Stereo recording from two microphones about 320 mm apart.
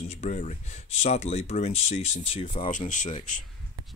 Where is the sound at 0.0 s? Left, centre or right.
Left.